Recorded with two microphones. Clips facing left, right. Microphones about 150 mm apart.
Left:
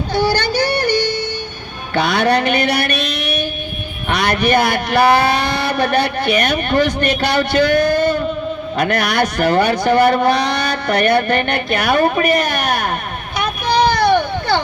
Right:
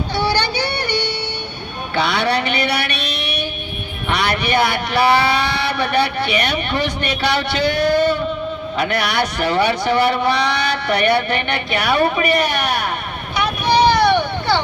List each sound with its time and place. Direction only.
0.1 s child singing: 45° left (ahead or behind)
2.0 s a man's voice: 45° left (ahead or behind)
13.3 s vehicle: 45° left (ahead or behind)